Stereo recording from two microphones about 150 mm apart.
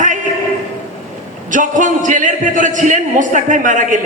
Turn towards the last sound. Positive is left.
turn(degrees=-60)  # may be behind; listen again after turning